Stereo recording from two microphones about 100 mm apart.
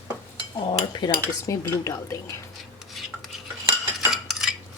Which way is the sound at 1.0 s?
45° left (ahead or behind).